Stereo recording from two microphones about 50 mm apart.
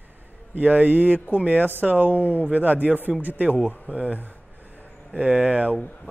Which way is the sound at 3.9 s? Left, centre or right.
Left.